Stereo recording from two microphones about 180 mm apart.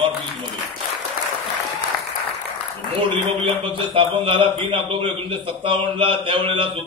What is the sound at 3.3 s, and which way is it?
A man's voice, 30° right (ahead or behind).